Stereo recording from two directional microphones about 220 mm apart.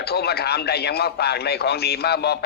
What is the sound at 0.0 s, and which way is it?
Speech, 45° left (ahead or behind).